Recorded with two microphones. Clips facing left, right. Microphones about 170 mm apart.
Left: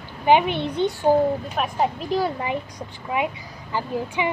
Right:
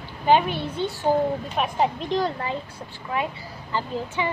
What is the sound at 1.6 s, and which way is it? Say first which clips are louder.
A woman's voice: right 2 dB; 5° left (ahead or behind).